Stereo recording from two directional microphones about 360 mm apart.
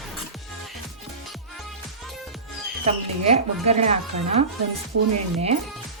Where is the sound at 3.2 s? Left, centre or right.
Centre.